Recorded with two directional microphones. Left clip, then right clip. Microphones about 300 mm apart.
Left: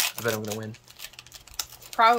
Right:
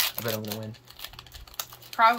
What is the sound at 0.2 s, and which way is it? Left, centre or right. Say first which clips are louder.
Speech: left 4 dB; centre.